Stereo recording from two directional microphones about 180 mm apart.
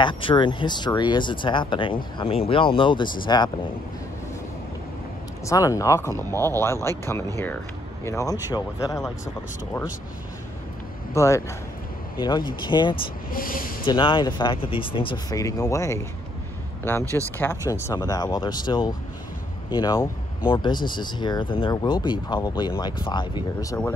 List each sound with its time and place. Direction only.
0.0 s speech: 30° left (ahead or behind)
5.4 s speech: 15° left (ahead or behind)
11.1 s speech: 15° left (ahead or behind)
12.9 s speech: 50° left (ahead or behind)
13.8 s speech: 25° left (ahead or behind)
17.4 s speech: 15° left (ahead or behind)